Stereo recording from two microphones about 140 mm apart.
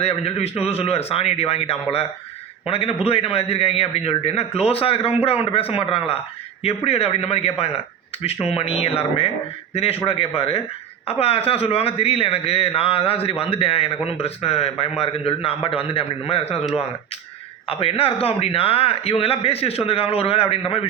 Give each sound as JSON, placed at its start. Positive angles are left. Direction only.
{"t": 0.0, "sound": "a man's voice", "side_deg": 45}
{"t": 17.7, "sound": "a man's voice", "side_deg": 45}